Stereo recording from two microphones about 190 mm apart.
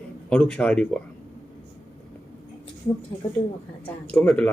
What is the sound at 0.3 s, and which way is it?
Speech, 5° left (ahead or behind).